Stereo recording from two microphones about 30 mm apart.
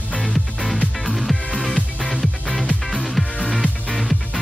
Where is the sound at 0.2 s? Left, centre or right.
Centre.